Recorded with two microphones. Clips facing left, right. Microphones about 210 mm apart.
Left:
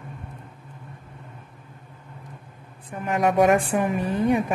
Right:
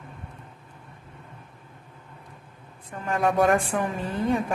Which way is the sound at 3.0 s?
15° left (ahead or behind).